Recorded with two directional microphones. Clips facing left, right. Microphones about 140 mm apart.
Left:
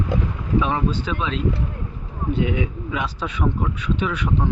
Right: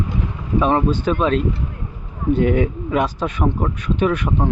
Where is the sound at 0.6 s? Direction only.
45° right (ahead or behind).